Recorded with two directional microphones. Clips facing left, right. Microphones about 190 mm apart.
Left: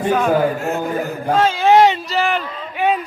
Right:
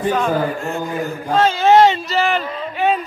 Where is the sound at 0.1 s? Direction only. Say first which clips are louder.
Left 6 dB; 5° left (ahead or behind).